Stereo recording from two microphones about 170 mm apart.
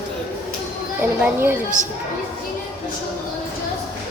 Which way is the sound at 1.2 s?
15° right (ahead or behind).